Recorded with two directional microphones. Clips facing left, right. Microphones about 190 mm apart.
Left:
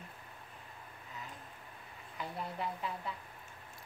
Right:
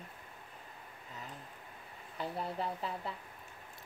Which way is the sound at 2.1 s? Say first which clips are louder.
Right 3 dB; 30° right (ahead or behind).